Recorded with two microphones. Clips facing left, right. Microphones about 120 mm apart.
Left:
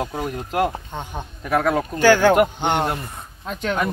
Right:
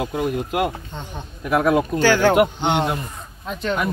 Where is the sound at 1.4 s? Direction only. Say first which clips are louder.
Right 2 dB; 15° right (ahead or behind).